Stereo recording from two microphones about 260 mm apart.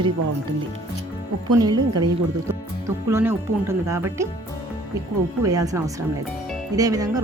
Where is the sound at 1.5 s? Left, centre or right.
Centre.